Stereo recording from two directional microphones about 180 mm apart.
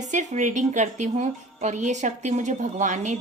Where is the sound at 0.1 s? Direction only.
45° right (ahead or behind).